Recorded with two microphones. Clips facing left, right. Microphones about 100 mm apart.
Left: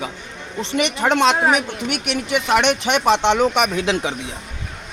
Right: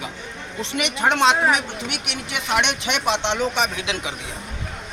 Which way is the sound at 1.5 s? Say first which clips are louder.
Left 3 dB; 40° left (ahead or behind).